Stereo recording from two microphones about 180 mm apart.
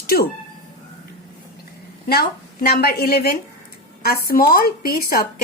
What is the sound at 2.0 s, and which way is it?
A woman's voice, 60° left (ahead or behind).